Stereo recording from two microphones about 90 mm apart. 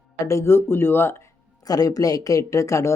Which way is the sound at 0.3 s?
30° left (ahead or behind).